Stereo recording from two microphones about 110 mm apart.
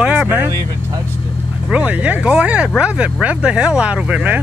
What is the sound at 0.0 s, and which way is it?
Vehicle, 10° right (ahead or behind).